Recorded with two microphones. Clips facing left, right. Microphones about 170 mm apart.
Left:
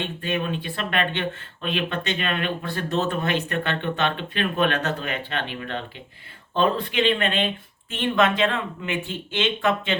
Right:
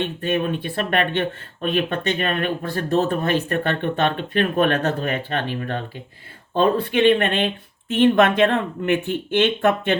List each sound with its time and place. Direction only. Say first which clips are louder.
0.2 s speech: right 3 dB; 45° right (ahead or behind)